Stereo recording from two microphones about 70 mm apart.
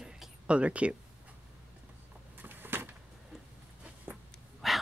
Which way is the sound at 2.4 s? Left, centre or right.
Right.